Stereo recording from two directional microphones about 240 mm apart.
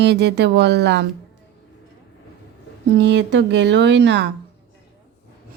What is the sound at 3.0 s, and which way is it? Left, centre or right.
Speech, right.